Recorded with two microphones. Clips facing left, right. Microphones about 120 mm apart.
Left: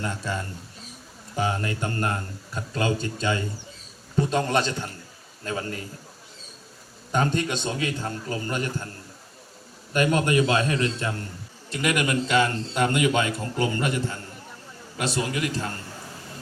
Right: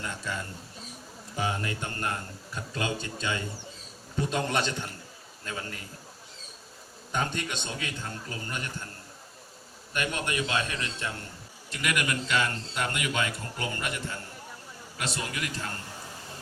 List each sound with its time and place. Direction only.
1.4 s a man's voice: 40° left (ahead or behind)
7.1 s a man's voice: 35° left (ahead or behind)
9.9 s a man's voice: 35° left (ahead or behind)
11.7 s a man's voice: 25° left (ahead or behind)